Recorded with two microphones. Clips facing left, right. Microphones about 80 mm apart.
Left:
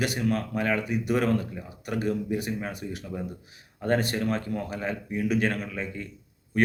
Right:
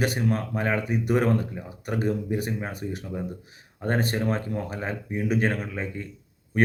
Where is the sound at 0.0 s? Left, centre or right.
Right.